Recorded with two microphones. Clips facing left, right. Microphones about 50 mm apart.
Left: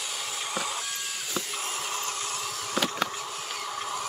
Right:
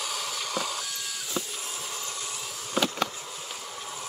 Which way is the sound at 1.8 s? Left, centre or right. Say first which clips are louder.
Left 4 dB; left.